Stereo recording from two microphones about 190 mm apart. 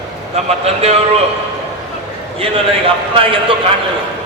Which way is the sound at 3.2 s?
30° right (ahead or behind).